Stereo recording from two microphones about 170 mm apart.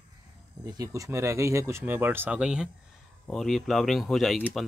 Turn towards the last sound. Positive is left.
turn(degrees=0)  # may be behind; listen again after turning